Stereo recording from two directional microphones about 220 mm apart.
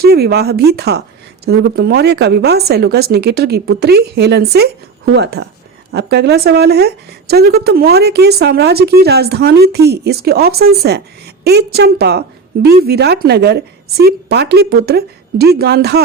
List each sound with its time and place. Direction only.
0.0 s speech: 45° right (ahead or behind)